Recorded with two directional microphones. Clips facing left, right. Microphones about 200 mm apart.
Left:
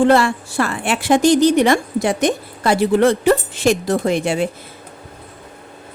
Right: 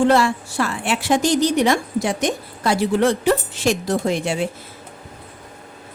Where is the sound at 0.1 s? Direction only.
55° left (ahead or behind).